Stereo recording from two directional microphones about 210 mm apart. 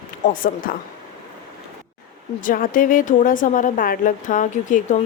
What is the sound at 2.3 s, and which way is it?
A woman's voice, 40° left (ahead or behind).